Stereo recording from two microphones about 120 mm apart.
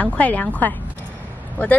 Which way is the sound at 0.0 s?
10° left (ahead or behind).